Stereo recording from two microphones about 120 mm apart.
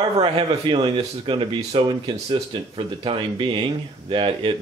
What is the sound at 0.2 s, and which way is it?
Speech, 45° right (ahead or behind).